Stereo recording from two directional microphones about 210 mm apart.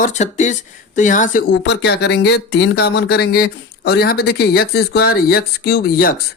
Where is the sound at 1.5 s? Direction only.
55° left (ahead or behind).